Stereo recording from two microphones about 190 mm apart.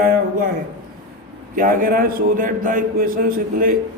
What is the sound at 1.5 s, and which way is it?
A man's voice, 45° right (ahead or behind).